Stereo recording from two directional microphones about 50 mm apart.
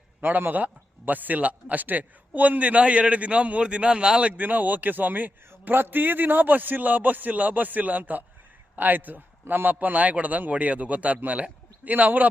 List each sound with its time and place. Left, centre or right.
0.2 s a man's voice: right; by 4.3 s centre
4.3 s a man's voice: right
5.5 s a man's voice: right